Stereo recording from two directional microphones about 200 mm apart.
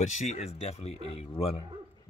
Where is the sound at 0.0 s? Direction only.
35° left (ahead or behind).